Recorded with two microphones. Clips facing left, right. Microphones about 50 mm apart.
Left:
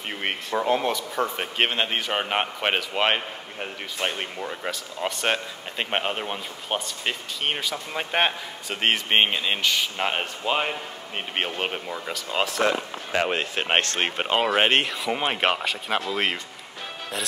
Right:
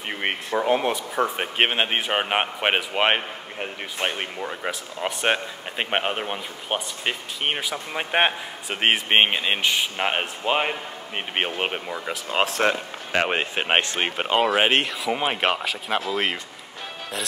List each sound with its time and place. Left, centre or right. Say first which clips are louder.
0.1 s speech: right 2 dB; centre
12.4 s speech: even; right
13.1 s speech: right 2 dB; right; by 16.3 s centre